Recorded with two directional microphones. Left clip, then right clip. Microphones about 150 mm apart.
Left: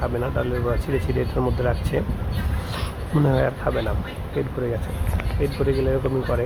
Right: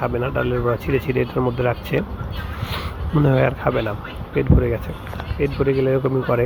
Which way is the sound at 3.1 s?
30° right (ahead or behind).